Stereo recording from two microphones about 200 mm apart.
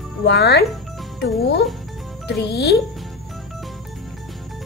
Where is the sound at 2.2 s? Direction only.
55° left (ahead or behind).